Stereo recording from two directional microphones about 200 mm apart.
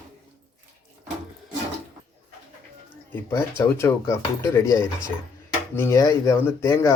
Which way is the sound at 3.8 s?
15° left (ahead or behind).